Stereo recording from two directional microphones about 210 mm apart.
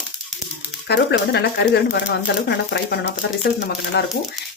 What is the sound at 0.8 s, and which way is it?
Speech, 50° left (ahead or behind).